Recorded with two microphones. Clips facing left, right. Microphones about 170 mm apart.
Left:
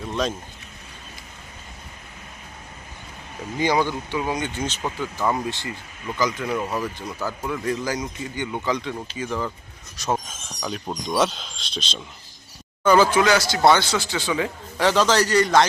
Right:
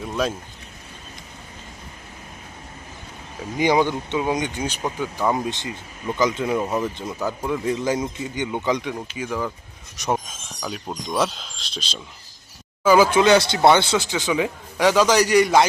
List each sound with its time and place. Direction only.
0.1 s a man's voice: 5° right (ahead or behind)
3.6 s a man's voice: 20° right (ahead or behind)
10.6 s speech: 5° right (ahead or behind)
13.1 s a man's voice: 25° right (ahead or behind)